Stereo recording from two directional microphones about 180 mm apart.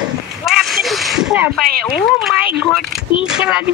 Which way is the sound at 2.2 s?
5° right (ahead or behind).